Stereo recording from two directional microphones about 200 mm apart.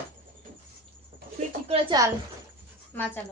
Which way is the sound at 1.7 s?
20° right (ahead or behind).